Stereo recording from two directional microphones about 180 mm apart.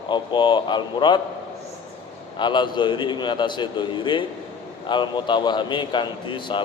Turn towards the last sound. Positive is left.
turn(degrees=25)  # may be behind; listen again after turning